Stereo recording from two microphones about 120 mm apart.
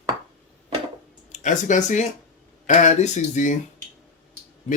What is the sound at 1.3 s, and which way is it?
Speech, 85° left.